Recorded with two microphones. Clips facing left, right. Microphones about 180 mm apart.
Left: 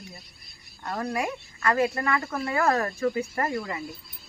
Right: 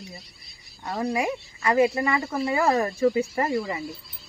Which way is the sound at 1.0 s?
10° right (ahead or behind).